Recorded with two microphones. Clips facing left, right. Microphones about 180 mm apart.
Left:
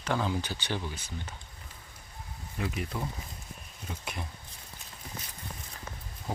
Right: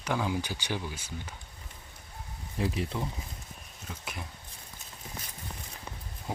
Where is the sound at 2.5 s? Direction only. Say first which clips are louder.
Right 3 dB; 30° right (ahead or behind).